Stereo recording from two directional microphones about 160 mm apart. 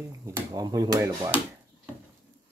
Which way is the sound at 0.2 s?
25° right (ahead or behind).